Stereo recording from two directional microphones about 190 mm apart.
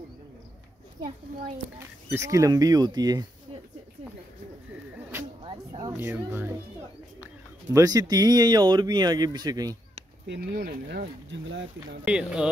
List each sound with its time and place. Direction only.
2.0 s speech: 15° right (ahead or behind)
5.4 s a sound: 25° right (ahead or behind)
5.9 s speech: 10° right (ahead or behind)
7.7 s speech: 20° right (ahead or behind)
10.3 s speech: 50° right (ahead or behind)
12.0 s speech: 5° right (ahead or behind)